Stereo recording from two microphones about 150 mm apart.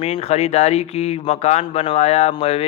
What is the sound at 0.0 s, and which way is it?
A man's voice, 40° left (ahead or behind).